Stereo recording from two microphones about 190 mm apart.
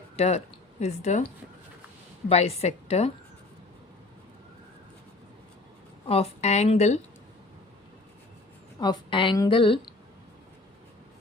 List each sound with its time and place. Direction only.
0.2 s speech: 35° left (ahead or behind)
2.3 s a woman's voice: 35° left (ahead or behind)
6.1 s a woman's voice: 35° left (ahead or behind)
8.8 s a woman's voice: 25° left (ahead or behind)